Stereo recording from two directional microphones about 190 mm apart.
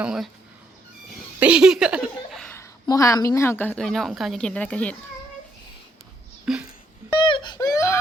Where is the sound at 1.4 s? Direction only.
5° right (ahead or behind).